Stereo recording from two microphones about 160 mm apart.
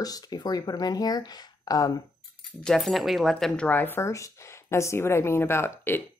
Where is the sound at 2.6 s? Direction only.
Centre (ahead or behind).